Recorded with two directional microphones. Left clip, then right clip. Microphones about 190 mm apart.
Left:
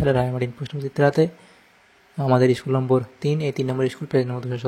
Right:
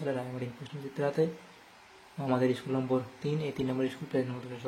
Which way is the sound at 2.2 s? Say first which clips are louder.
Left 11 dB; 40° left (ahead or behind).